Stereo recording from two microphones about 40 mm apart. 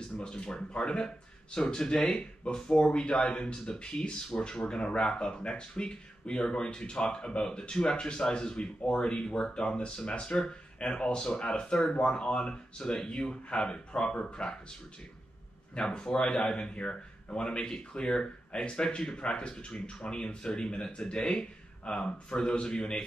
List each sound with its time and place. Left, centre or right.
0.2 s speech: centre
4.3 s speech: left
4.6 s speech: left
15.7 s speech: left